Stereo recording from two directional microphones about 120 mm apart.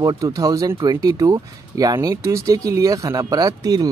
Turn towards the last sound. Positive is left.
turn(degrees=-30)  # may be behind; listen again after turning